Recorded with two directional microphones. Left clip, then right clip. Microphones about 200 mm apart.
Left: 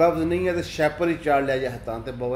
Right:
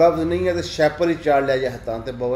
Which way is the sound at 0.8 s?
Centre (ahead or behind).